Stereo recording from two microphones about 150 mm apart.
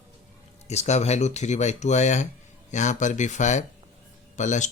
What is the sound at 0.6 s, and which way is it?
Speech, 45° left (ahead or behind).